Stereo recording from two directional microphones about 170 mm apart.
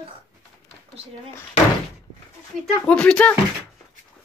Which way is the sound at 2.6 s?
5° left (ahead or behind).